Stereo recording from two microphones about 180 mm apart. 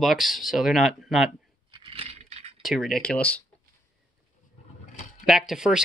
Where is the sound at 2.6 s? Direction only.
Centre (ahead or behind).